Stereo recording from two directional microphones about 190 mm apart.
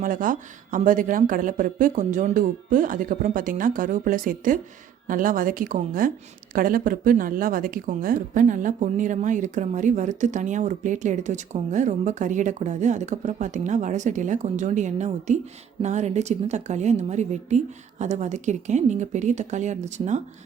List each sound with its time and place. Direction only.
0.0 s speech: 45° right (ahead or behind)